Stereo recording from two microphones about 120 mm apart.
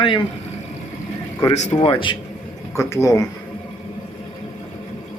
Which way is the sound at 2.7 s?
25° left (ahead or behind).